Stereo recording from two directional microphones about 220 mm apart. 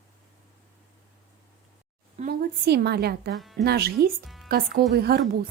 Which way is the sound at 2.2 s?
45° right (ahead or behind).